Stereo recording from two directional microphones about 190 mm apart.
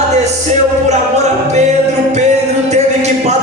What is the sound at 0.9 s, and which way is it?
Music, 35° right (ahead or behind).